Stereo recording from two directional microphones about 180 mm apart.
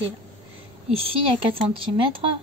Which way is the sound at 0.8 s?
30° right (ahead or behind).